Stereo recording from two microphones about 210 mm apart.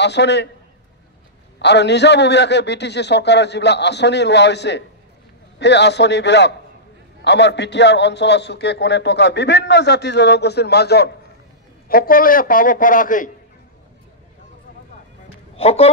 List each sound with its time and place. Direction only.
0.0 s a man's voice: 55° left (ahead or behind)
1.6 s a man's voice: 55° left (ahead or behind)
15.5 s speech: 30° left (ahead or behind)